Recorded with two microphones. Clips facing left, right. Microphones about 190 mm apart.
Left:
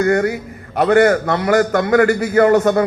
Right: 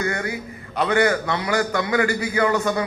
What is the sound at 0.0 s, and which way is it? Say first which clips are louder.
A man's voice: left 10 dB; 45° left (ahead or behind).